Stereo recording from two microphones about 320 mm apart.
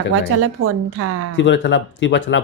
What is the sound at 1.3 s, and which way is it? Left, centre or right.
Speech, left.